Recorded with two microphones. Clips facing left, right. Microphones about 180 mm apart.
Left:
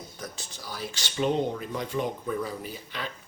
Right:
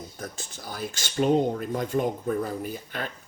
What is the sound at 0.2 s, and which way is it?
Speech, 50° right (ahead or behind).